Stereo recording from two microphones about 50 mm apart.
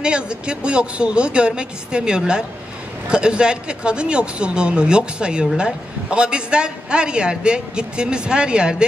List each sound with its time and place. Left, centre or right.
0.0 s a man's voice: centre